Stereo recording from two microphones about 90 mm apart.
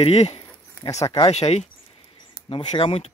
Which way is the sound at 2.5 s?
85° left.